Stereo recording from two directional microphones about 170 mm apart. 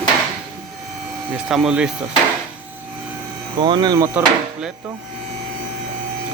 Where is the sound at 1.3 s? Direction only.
5° right (ahead or behind).